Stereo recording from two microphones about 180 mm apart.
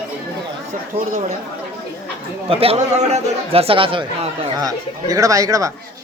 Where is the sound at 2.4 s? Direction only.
30° right (ahead or behind).